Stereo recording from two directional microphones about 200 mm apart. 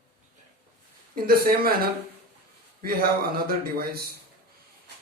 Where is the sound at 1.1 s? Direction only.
45° right (ahead or behind).